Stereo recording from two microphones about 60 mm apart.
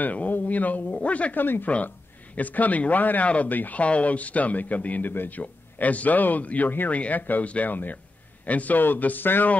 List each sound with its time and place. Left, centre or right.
0.0 s speech: left
5.4 s speech: left